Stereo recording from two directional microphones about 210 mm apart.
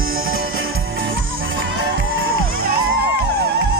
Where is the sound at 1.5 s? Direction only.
50° right (ahead or behind).